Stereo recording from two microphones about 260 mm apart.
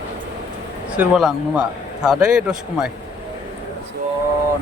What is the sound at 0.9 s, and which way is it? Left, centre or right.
A man's voice, centre.